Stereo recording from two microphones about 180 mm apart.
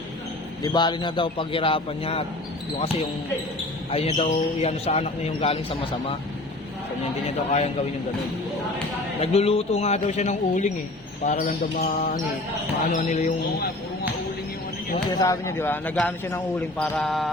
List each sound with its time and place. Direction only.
0.6 s a man's voice: 25° left (ahead or behind)
3.9 s a man's voice: 35° left (ahead or behind)
7.3 s a man's voice: 35° left (ahead or behind)
9.2 s a man's voice: 35° left (ahead or behind)
11.3 s speech: 50° left (ahead or behind)
15.2 s speech: 15° left (ahead or behind); by 17.2 s centre (ahead or behind)